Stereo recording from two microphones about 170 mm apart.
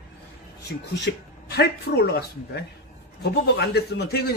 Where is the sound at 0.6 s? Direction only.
85° left.